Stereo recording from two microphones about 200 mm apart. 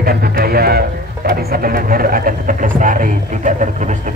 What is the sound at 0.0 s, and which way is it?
Speech, 50° right (ahead or behind).